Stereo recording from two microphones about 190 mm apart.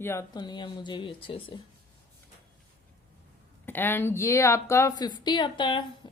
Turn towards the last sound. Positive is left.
turn(degrees=25)  # may be behind; listen again after turning